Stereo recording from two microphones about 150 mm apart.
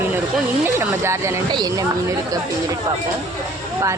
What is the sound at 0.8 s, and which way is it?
Speech, 20° right (ahead or behind).